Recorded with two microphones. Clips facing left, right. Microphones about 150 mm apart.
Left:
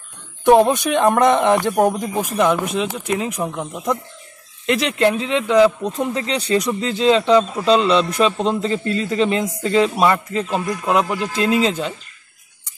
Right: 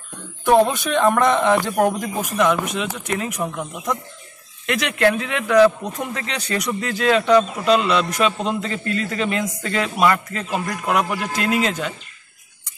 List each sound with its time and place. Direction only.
0.5 s speech: 20° left (ahead or behind)
4.6 s a man's voice: 30° left (ahead or behind)